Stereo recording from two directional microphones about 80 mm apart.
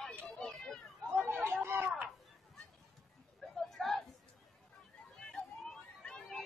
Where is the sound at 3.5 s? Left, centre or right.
Centre.